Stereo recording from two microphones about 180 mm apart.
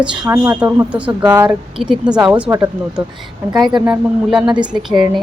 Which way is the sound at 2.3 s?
15° right (ahead or behind).